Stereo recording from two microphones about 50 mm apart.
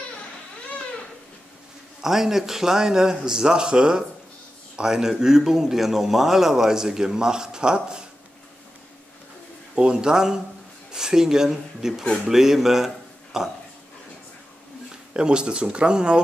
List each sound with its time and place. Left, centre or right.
2.0 s a man's voice: centre
9.8 s a man's voice: centre
15.1 s speech: centre